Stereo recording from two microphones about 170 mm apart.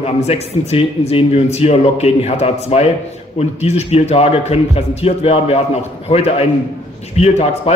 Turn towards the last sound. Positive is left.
turn(degrees=40)  # may be behind; listen again after turning